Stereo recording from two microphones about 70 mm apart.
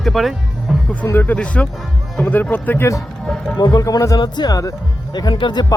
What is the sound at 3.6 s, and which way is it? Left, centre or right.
Speech, left.